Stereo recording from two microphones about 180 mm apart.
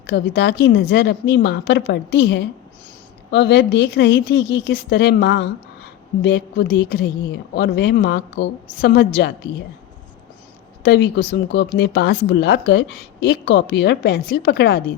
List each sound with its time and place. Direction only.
0.1 s a woman's voice: 85° left; by 9.0 s 60° left (ahead or behind)
10.8 s a woman's voice: 70° left (ahead or behind)